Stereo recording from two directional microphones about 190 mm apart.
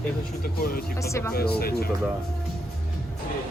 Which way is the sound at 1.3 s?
55° left (ahead or behind).